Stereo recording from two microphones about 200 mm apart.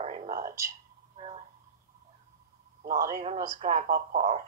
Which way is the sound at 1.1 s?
30° right (ahead or behind).